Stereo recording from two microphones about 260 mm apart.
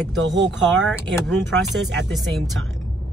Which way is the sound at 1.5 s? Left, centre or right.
Right.